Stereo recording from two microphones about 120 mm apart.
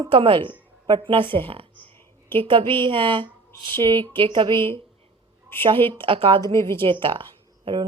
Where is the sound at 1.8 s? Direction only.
15° left (ahead or behind).